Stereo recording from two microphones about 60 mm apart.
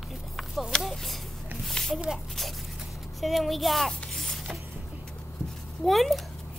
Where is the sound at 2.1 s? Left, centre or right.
Centre.